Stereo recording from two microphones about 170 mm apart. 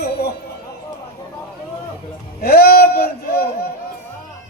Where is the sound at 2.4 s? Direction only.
65° left (ahead or behind).